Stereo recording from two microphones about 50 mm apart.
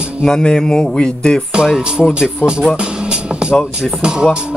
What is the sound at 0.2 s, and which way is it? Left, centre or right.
Speech, centre.